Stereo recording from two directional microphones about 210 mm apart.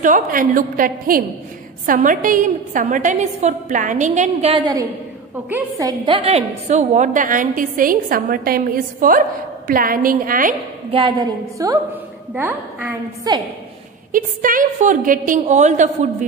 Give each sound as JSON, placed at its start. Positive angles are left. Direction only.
{"t": 0.0, "sound": "a woman's voice", "side_deg": -40}
{"t": 10.9, "sound": "a woman's voice", "side_deg": -20}
{"t": 14.1, "sound": "a woman's voice", "side_deg": -40}